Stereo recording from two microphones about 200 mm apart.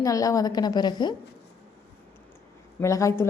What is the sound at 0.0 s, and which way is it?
Speech, 15° left (ahead or behind).